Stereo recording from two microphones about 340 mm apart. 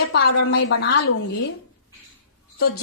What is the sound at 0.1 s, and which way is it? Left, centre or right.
Speech, left.